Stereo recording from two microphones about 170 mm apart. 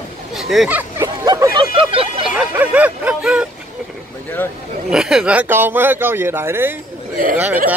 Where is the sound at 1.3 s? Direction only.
20° right (ahead or behind).